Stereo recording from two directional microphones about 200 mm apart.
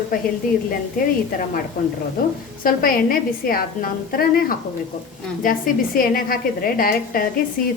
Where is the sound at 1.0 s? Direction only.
45° left (ahead or behind).